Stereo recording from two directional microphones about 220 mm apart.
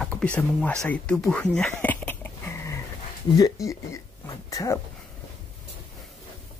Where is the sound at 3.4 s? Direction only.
15° left (ahead or behind).